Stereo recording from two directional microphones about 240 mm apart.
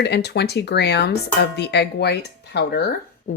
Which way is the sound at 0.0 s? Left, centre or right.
Left.